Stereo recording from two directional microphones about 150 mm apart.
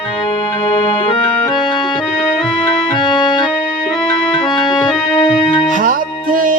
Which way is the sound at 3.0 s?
30° left (ahead or behind).